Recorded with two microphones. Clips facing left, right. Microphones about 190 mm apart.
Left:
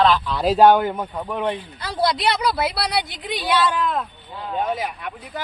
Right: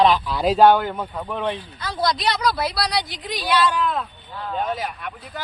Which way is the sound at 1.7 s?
30° left (ahead or behind).